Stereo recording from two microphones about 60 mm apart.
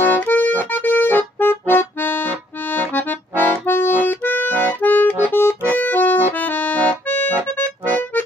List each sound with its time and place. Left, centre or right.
0.2 s accordion: left
5.3 s accordion: left
5.7 s accordion: left
7.4 s music: left